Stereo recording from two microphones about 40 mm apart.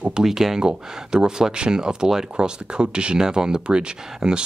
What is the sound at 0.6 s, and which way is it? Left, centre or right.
Speech, right.